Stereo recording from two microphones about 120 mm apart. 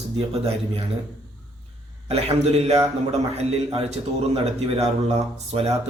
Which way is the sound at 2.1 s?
60° right (ahead or behind).